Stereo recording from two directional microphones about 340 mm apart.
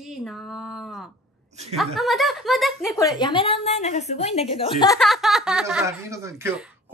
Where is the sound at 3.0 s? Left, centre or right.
Centre.